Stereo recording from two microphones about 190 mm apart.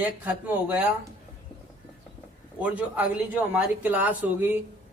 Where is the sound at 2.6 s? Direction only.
5° right (ahead or behind).